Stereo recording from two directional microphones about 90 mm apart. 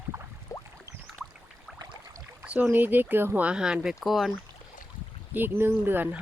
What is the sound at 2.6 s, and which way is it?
Speech, 20° right (ahead or behind).